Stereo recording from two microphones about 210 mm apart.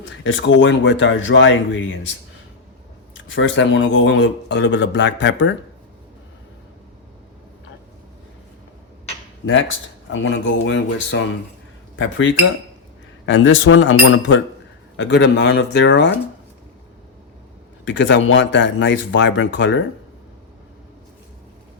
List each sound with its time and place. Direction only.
0.3 s speech: 60° left (ahead or behind)
3.3 s speech: 60° left (ahead or behind)
9.5 s speech: 65° left (ahead or behind)
14.9 s speech: 55° left (ahead or behind)
17.8 s speech: 60° left (ahead or behind)